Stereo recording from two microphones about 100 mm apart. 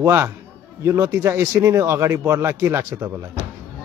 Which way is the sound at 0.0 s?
25° right (ahead or behind).